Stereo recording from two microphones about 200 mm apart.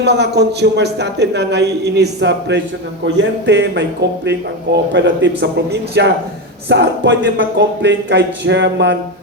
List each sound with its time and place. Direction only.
0.0 s speech: 55° right (ahead or behind)